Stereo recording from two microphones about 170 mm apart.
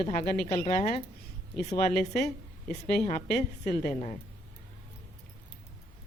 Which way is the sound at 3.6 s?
45° left (ahead or behind).